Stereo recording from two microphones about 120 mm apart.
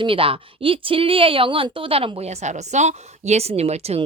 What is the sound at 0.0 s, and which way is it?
Speech, 50° right (ahead or behind).